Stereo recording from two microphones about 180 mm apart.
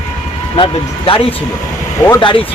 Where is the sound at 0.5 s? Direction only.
30° left (ahead or behind).